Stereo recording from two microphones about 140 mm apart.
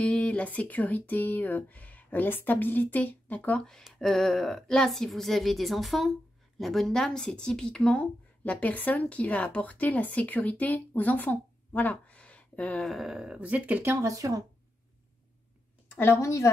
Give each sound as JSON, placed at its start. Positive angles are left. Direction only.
{"t": 0.0, "sound": "speech", "side_deg": 10}
{"t": 15.9, "sound": "speech", "side_deg": 15}